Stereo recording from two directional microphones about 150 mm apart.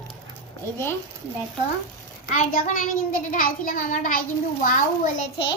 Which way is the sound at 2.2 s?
55° left (ahead or behind).